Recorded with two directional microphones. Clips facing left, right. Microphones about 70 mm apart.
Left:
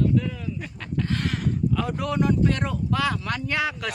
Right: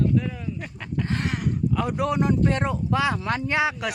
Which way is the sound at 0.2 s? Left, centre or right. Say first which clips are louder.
Even; right.